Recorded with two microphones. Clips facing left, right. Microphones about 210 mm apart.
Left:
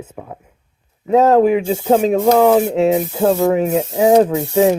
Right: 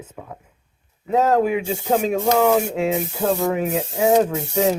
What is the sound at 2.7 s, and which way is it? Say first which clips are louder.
Speech: left 7 dB; 35° left (ahead or behind).